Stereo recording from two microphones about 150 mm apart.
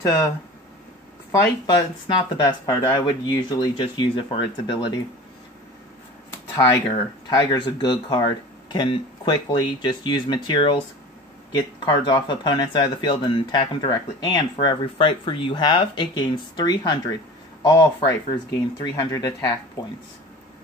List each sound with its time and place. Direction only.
0.0 s speech: 20° left (ahead or behind)
1.3 s speech: 25° left (ahead or behind)
6.6 s speech: 30° left (ahead or behind)